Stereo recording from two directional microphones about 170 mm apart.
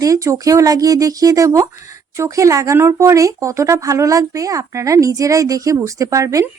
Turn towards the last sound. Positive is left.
turn(degrees=-20)  # may be behind; listen again after turning